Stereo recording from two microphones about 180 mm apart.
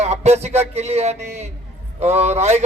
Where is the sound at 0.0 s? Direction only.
35° right (ahead or behind).